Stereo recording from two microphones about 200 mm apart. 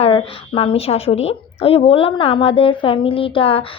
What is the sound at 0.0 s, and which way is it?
A woman's voice, 25° left (ahead or behind).